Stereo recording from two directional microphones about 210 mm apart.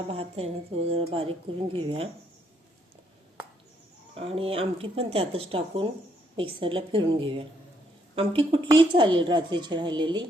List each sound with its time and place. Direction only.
0.1 s speech: 30° right (ahead or behind)
4.1 s speech: 25° right (ahead or behind)